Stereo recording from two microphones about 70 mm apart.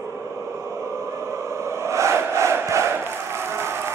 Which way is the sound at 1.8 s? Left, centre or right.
Right.